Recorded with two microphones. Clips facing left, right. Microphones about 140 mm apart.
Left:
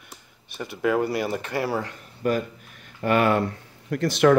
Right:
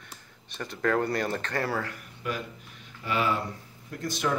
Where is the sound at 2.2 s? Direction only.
45° left (ahead or behind).